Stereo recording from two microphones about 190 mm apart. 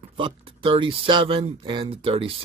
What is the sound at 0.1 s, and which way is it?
Speech, 25° right (ahead or behind).